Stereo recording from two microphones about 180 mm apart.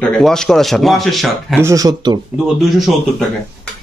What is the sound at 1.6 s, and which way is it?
Speech, 20° right (ahead or behind).